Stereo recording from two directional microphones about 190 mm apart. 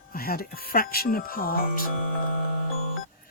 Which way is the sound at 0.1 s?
50° left (ahead or behind).